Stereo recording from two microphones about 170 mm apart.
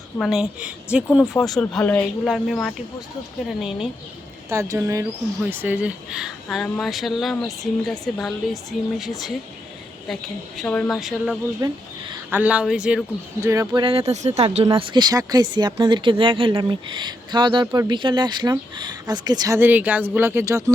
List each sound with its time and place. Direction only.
0.2 s speech: centre (ahead or behind)
4.4 s speech: 20° right (ahead or behind); by 9.3 s centre (ahead or behind)
10.6 s speech: 5° left (ahead or behind)
11.6 s speech: 25° right (ahead or behind)
12.3 s speech: 10° right (ahead or behind)
13.4 s speech: 20° right (ahead or behind)
13.8 s speech: 35° right (ahead or behind)
14.8 s speech: 25° right (ahead or behind)